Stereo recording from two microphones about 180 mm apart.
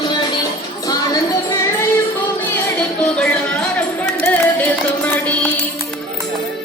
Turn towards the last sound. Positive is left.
turn(degrees=5)  # may be behind; listen again after turning